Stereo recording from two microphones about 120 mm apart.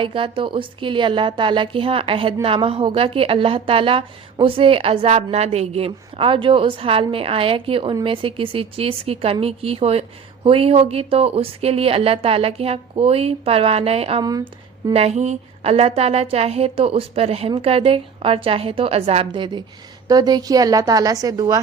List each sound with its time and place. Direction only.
0.0 s a woman's voice: 45° right (ahead or behind)
14.2 s a woman's voice: 30° right (ahead or behind)
14.9 s a woman's voice: 65° right (ahead or behind)
19.3 s a woman's voice: 40° right (ahead or behind)